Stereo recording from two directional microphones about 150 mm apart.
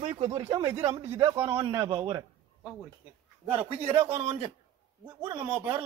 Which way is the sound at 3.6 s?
40° right (ahead or behind).